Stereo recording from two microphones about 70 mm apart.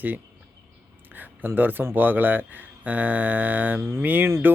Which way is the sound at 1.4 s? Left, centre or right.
Right.